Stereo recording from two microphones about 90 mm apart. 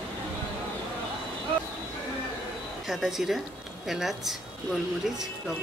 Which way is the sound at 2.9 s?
5° right (ahead or behind).